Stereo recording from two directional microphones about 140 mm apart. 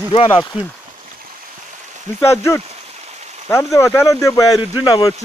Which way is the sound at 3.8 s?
20° left (ahead or behind).